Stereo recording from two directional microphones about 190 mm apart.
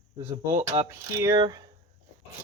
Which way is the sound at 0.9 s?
20° right (ahead or behind).